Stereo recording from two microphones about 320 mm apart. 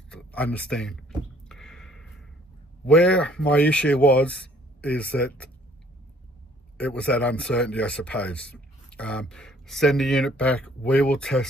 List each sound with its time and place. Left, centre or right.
0.1 s a sound: centre
2.9 s speech: centre
6.8 s speech: centre